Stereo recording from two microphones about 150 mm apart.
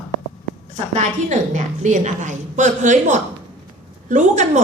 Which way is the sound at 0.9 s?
55° right (ahead or behind).